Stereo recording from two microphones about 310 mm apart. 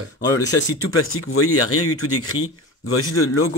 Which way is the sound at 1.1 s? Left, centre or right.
Left.